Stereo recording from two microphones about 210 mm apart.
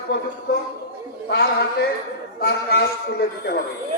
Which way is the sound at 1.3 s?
50° left (ahead or behind).